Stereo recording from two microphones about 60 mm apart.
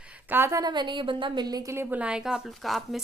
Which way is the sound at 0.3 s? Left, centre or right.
Right.